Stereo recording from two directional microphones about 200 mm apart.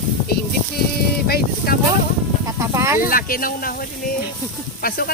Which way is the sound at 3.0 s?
45° left (ahead or behind).